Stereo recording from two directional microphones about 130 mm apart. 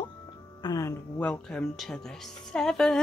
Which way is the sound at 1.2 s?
10° left (ahead or behind).